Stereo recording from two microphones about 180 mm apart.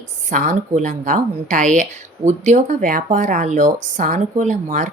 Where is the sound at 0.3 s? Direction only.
45° right (ahead or behind).